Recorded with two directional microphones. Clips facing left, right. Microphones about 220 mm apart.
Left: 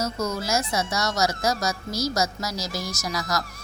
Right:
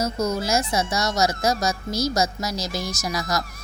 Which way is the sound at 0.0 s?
20° right (ahead or behind).